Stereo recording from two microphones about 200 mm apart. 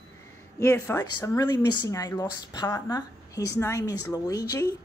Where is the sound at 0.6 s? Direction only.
10° left (ahead or behind).